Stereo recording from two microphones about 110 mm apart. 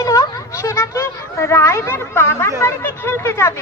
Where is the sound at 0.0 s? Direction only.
30° left (ahead or behind).